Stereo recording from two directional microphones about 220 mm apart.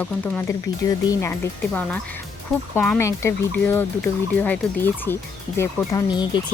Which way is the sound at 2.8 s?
5° left (ahead or behind).